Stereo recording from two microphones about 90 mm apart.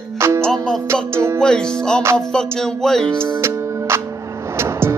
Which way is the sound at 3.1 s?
30° right (ahead or behind).